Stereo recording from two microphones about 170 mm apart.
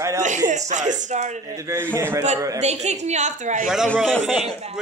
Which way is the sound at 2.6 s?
40° right (ahead or behind).